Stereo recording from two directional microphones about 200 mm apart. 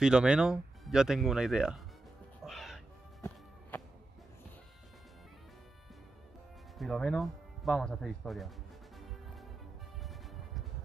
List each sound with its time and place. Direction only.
0.0 s speech: 5° right (ahead or behind)
2.4 s crow: centre (ahead or behind)
3.2 s music: 10° left (ahead or behind)
6.8 s speech: centre (ahead or behind)